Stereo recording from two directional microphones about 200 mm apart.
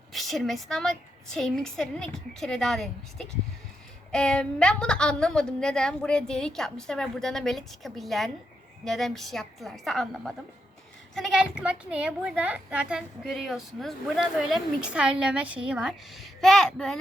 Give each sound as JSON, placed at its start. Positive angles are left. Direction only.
{"t": 0.1, "sound": "a woman's voice", "side_deg": 0}